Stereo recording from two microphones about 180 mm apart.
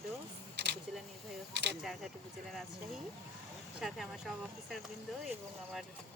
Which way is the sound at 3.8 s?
Centre (ahead or behind).